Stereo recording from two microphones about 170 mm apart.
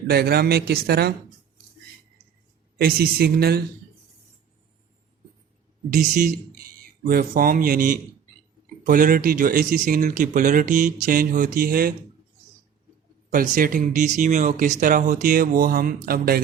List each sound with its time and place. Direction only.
0.1 s speech: 65° right (ahead or behind)
2.7 s speech: 65° right (ahead or behind)
5.9 s speech: 50° right (ahead or behind)
13.3 s speech: 55° right (ahead or behind)